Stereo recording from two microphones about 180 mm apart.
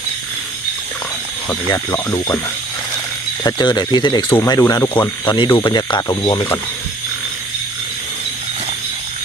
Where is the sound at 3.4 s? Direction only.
25° left (ahead or behind).